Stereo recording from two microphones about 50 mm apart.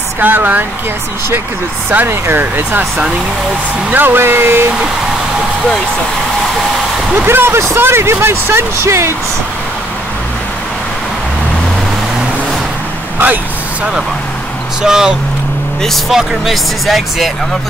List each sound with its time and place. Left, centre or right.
0.2 s speech: right
2.0 s speech: right
3.9 s speech: right
7.2 s speech: right
14.8 s speech: centre